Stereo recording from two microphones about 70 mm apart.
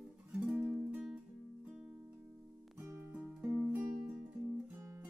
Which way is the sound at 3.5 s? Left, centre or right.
Centre.